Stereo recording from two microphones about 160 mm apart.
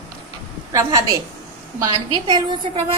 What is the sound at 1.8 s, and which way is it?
Speech, 25° right (ahead or behind).